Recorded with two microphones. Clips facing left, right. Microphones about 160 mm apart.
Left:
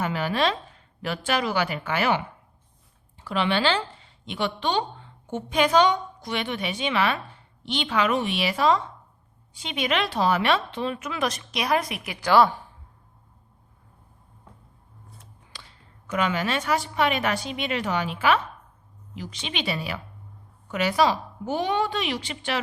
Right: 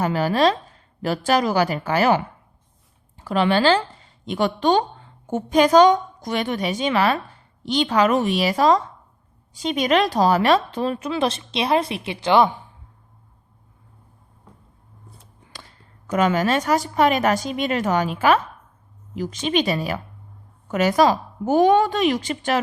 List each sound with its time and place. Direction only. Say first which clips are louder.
0.0 s a woman's voice: right 6 dB; 40° right (ahead or behind); by 12.5 s 20° right (ahead or behind)
15.5 s a woman's voice: right 5 dB; 45° right (ahead or behind)